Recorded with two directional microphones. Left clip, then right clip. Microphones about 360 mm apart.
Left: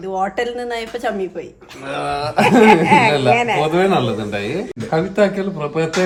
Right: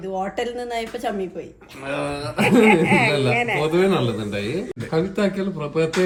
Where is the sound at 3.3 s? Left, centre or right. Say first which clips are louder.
Left 5 dB; left.